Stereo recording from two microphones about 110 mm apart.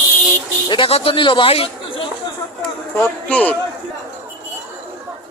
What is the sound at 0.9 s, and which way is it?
Speech, 60° left (ahead or behind).